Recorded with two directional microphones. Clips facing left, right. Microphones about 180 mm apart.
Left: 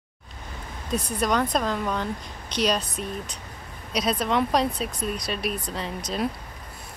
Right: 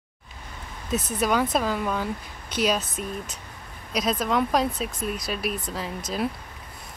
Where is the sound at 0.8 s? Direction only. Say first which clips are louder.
Right 1 dB; 5° right (ahead or behind).